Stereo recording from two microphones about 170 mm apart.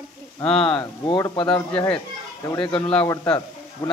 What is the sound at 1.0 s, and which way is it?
Speech, 25° left (ahead or behind).